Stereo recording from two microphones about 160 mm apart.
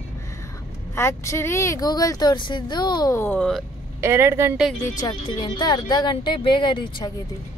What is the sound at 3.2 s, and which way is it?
Speech, 10° left (ahead or behind).